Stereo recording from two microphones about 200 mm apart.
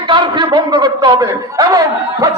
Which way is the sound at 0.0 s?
20° right (ahead or behind).